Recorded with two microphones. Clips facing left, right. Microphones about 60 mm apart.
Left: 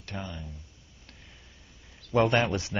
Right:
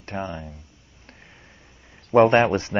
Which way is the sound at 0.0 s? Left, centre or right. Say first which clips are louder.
Right 8 dB; right.